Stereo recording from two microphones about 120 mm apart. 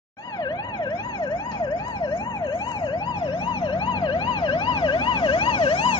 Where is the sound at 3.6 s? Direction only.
45° left (ahead or behind).